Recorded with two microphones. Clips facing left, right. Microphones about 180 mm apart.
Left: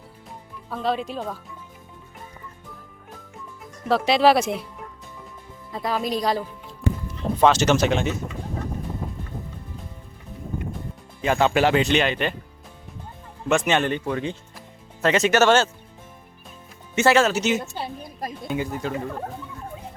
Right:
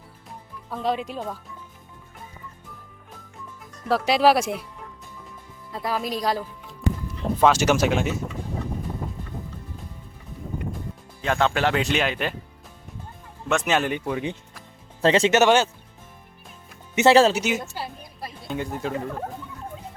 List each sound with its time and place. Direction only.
0.7 s speech: 15° right (ahead or behind)
3.8 s speech: 10° right (ahead or behind)
5.7 s speech: 5° right (ahead or behind)
7.4 s speech: 10° right (ahead or behind)
11.2 s speech: 5° left (ahead or behind)
11.8 s speech: 5° right (ahead or behind)
13.5 s speech: 5° right (ahead or behind)
15.0 s speech: 30° right (ahead or behind)
15.4 s speech: 15° right (ahead or behind)
16.9 s speech: 20° right (ahead or behind)
18.4 s speech: 5° left (ahead or behind)